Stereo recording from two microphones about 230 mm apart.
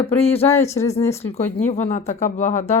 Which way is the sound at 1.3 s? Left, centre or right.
Left.